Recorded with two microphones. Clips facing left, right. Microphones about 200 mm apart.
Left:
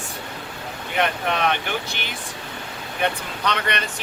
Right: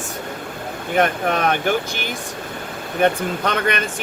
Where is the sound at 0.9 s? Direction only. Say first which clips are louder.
Right 4 dB; 45° right (ahead or behind).